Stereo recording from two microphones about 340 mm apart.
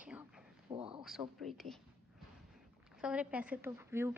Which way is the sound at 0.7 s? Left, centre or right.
Centre.